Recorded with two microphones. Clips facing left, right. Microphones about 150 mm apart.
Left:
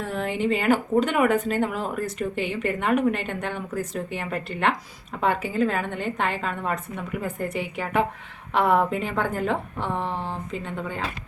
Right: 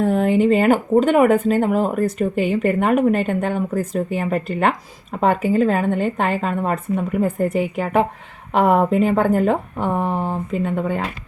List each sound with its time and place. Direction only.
0.0 s speech: 45° right (ahead or behind)